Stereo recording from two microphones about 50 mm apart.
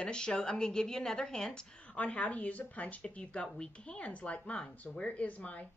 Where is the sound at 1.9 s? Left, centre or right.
Left.